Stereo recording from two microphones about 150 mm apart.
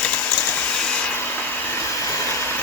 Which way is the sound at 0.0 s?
10° left (ahead or behind).